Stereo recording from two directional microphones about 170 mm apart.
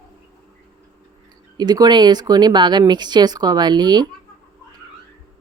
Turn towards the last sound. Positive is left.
turn(degrees=-25)  # may be behind; listen again after turning